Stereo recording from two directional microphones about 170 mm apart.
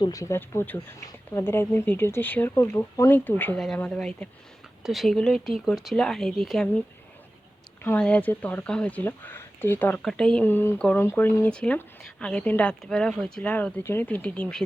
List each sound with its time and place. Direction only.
0.0 s speech: 20° left (ahead or behind); by 6.8 s 5° left (ahead or behind)
7.9 s speech: 5° left (ahead or behind)